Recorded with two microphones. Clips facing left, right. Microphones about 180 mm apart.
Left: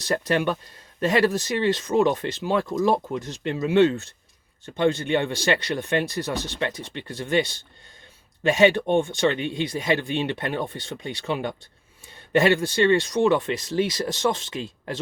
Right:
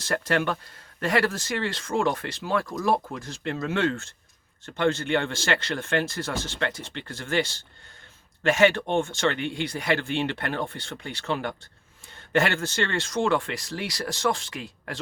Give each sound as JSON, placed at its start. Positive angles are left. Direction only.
{"t": 0.0, "sound": "speech", "side_deg": 20}